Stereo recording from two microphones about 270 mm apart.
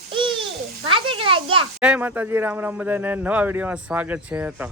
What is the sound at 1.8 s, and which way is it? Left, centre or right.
Speech, centre.